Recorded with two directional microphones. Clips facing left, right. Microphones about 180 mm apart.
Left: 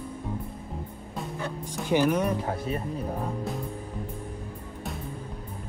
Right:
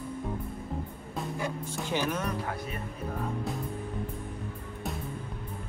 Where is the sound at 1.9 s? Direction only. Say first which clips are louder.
Left 8 dB; 15° left (ahead or behind).